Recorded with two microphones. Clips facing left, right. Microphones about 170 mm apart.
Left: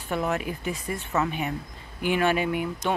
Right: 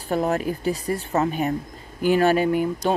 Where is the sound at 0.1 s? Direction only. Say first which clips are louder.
Right 5 dB; 35° right (ahead or behind).